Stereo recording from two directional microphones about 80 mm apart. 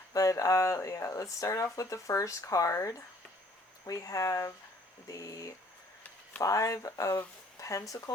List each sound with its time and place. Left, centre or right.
0.1 s speech: left